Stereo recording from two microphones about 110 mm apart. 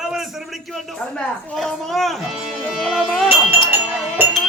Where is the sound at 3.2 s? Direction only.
15° right (ahead or behind).